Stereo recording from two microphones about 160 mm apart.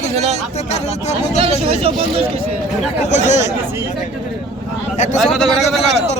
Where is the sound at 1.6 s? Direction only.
35° right (ahead or behind).